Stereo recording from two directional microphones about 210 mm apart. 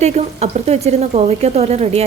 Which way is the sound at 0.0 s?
30° right (ahead or behind).